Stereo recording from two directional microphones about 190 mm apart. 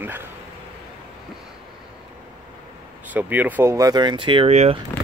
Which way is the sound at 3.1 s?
10° right (ahead or behind).